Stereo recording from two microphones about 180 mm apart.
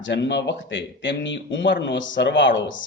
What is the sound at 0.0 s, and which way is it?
A man's voice, 80° left.